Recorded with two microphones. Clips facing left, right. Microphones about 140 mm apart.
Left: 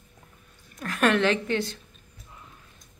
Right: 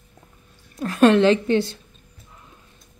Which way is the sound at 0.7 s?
30° right (ahead or behind).